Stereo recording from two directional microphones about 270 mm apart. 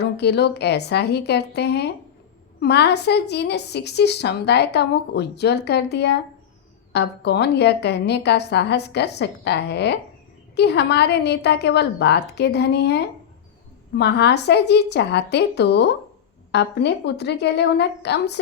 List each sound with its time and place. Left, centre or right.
0.0 s a woman's voice: left